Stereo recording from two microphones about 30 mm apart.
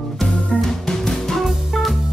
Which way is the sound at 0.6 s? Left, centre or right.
Centre.